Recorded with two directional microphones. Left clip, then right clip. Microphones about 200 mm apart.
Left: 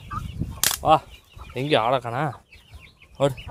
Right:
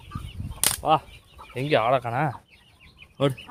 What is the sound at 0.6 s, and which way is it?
Camera, 25° left (ahead or behind).